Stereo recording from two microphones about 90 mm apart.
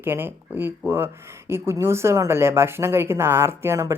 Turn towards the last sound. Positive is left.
turn(degrees=-30)  # may be behind; listen again after turning